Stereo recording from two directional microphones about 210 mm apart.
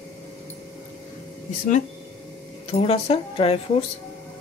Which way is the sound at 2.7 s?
30° left (ahead or behind).